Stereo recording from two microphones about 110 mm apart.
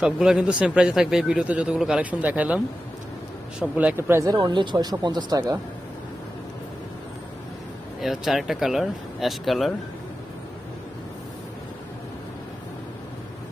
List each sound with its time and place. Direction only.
0.0 s speech: 5° right (ahead or behind)
3.6 s speech: 15° right (ahead or behind)
4.3 s speech: 35° right (ahead or behind)
8.0 s speech: 5° right (ahead or behind)